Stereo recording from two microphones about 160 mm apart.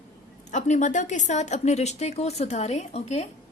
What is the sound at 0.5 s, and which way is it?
A woman's voice, 50° left (ahead or behind).